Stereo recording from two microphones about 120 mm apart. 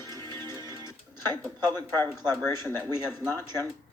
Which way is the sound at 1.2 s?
35° right (ahead or behind).